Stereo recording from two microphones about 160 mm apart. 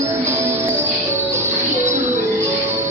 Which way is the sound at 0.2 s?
20° right (ahead or behind).